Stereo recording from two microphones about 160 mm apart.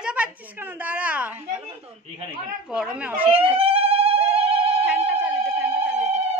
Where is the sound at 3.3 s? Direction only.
35° right (ahead or behind).